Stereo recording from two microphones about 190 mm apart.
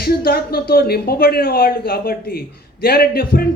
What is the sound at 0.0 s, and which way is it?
A man's voice, 55° left (ahead or behind).